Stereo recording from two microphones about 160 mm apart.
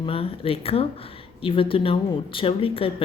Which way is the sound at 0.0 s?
35° left (ahead or behind).